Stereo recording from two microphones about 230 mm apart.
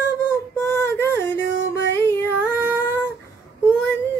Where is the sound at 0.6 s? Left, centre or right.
Centre.